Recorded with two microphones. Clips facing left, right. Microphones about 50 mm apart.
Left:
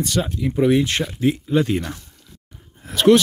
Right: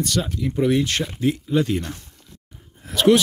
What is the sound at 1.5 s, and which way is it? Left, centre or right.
Speech, left.